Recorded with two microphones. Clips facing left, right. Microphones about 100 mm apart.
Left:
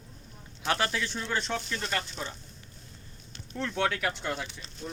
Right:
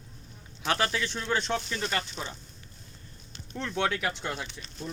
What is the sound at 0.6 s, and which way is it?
Speech, centre (ahead or behind).